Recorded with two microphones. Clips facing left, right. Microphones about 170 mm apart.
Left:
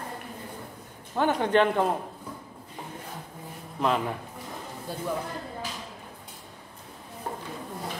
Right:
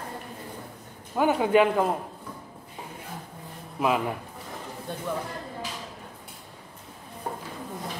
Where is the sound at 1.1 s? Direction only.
10° right (ahead or behind).